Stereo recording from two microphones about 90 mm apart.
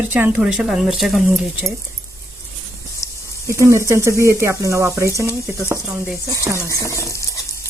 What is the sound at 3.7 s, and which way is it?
Speech, 30° right (ahead or behind).